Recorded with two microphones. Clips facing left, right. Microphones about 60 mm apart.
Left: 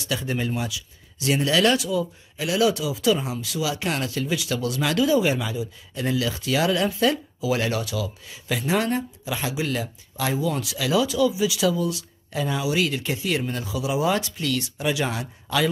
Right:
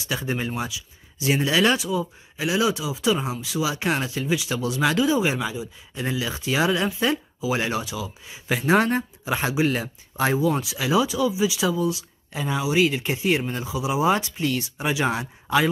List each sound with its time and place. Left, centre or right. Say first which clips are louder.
0.1 s speech: even; right